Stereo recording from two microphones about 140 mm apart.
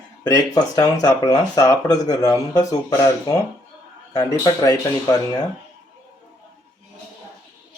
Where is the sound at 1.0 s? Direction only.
30° left (ahead or behind).